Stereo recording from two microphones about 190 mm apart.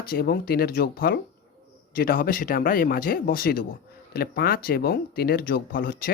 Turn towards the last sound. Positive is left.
turn(degrees=50)  # may be behind; listen again after turning